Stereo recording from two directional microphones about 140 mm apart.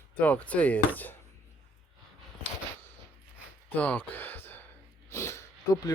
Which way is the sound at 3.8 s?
10° left (ahead or behind).